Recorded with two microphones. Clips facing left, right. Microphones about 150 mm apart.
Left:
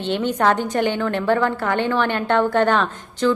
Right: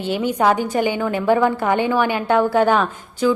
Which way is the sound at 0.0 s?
10° right (ahead or behind).